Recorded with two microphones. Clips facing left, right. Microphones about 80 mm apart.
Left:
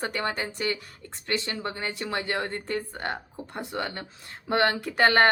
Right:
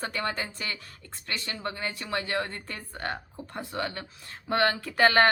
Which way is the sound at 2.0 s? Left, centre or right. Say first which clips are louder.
Left 1 dB; left.